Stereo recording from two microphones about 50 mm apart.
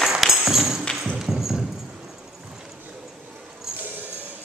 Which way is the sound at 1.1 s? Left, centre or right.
Centre.